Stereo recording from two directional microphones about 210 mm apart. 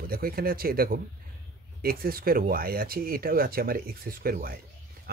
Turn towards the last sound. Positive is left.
turn(degrees=-45)  # may be behind; listen again after turning